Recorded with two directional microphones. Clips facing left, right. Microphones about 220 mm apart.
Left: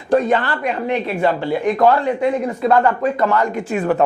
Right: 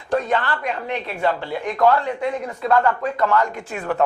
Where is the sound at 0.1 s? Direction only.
10° left (ahead or behind).